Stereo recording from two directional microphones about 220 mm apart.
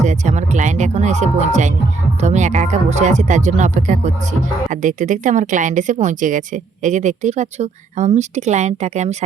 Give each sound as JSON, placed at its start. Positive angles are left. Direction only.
{"t": 0.0, "sound": "speech", "side_deg": -35}